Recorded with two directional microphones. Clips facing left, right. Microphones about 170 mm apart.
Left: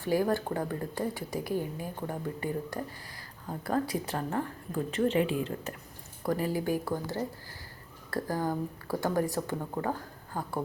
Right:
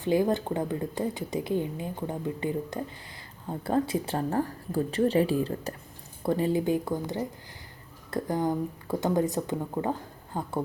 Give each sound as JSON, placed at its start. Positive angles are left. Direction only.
{"t": 0.0, "sound": "a woman's voice", "side_deg": -20}